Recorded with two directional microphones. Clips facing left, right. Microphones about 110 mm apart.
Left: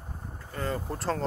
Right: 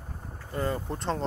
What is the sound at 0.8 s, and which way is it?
Speech, centre (ahead or behind).